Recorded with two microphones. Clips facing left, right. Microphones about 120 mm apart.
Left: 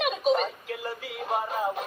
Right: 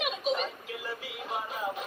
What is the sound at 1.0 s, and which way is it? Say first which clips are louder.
Music: left 10 dB; 50° left (ahead or behind).